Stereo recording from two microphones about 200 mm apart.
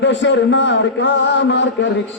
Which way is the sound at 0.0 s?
65° left (ahead or behind).